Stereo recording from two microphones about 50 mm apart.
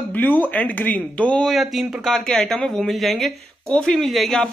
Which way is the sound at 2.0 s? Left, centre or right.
Centre.